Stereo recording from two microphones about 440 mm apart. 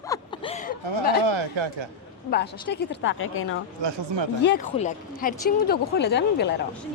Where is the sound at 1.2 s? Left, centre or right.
Right.